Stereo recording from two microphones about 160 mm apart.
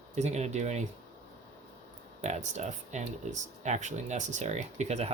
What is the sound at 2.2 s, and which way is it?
Speech, 45° right (ahead or behind).